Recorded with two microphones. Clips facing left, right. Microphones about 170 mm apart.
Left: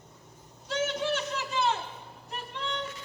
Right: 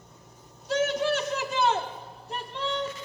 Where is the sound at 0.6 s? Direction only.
45° right (ahead or behind).